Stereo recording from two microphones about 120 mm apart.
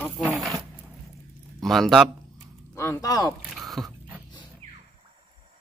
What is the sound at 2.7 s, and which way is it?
Speech, 25° left (ahead or behind).